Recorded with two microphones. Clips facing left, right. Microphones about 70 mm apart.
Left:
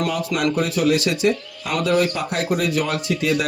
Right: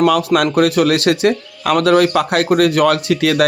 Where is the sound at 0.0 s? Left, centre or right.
Right.